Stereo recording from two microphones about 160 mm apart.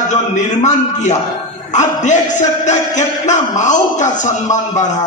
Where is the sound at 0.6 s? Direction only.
45° left (ahead or behind).